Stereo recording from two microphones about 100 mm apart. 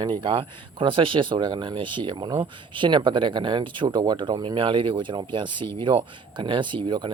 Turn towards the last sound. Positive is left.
turn(degrees=-50)  # may be behind; listen again after turning